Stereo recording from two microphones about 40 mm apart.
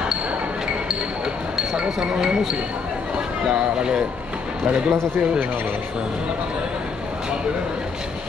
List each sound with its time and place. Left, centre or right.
1.8 s speech: centre